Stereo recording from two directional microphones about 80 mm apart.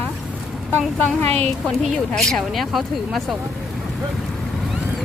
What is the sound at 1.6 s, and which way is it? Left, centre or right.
Speech, centre.